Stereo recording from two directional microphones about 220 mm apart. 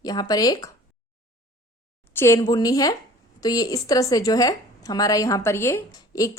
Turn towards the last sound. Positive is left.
turn(degrees=15)  # may be behind; listen again after turning